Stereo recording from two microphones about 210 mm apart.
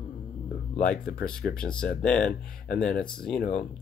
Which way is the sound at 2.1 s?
35° left (ahead or behind).